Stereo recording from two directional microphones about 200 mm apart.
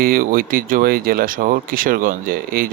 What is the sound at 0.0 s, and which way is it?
Speech, 45° right (ahead or behind).